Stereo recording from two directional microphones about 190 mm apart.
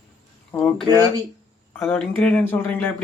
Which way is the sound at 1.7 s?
10° left (ahead or behind).